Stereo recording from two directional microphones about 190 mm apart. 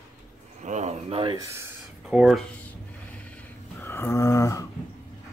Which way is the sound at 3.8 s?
10° left (ahead or behind).